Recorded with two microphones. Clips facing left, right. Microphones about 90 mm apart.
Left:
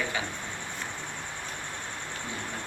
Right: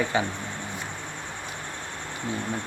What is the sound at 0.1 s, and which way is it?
Speech, 30° right (ahead or behind).